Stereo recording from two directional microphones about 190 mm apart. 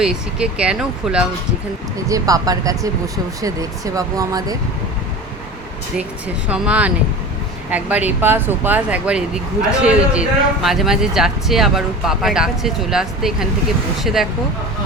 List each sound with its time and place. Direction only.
0.0 s speech: 5° right (ahead or behind)
2.0 s speech: 20° right (ahead or behind)
6.5 s speech: 5° right (ahead or behind)